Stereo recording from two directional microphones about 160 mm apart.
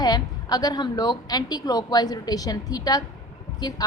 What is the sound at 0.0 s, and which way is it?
A woman's voice, 25° left (ahead or behind).